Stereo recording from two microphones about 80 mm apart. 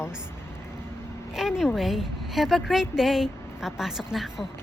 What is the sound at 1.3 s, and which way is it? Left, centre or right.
Speech, centre.